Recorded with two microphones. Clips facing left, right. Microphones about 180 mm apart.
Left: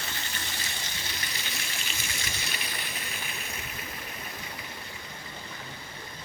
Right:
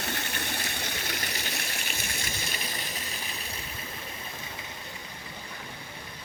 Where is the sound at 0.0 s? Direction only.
60° right (ahead or behind).